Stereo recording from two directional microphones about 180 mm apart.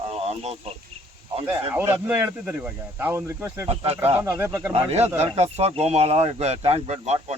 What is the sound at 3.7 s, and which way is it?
Speech, 35° right (ahead or behind).